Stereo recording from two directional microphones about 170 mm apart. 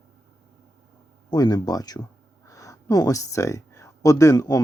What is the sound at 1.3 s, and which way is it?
Speech, 25° left (ahead or behind).